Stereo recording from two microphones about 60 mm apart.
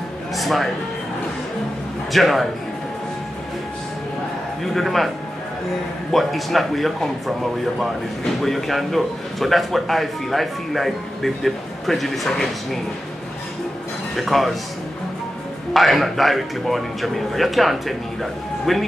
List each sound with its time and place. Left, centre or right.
0.4 s speech: centre
2.1 s a man's voice: centre
4.7 s a man's voice: centre
6.1 s a man's voice: centre
8.4 s a man's voice: centre
14.1 s a man's voice: centre
15.7 s a man's voice: centre